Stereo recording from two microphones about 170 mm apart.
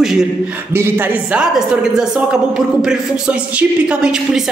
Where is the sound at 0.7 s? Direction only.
15° right (ahead or behind).